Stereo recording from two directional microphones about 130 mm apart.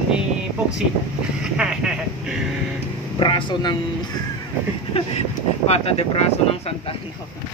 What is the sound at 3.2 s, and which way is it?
Speech, 35° left (ahead or behind).